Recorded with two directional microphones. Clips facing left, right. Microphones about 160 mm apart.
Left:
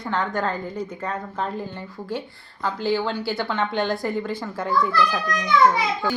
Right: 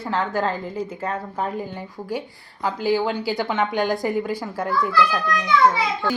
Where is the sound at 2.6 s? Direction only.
10° right (ahead or behind).